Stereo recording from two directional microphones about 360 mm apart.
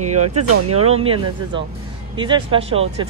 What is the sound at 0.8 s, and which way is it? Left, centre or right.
A woman's voice, centre.